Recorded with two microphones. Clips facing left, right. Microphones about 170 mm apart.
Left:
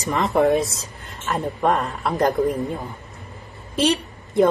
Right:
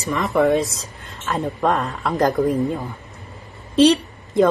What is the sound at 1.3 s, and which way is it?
A woman's voice, centre (ahead or behind).